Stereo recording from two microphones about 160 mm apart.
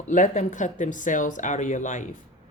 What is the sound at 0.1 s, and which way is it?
Speech, 50° left (ahead or behind).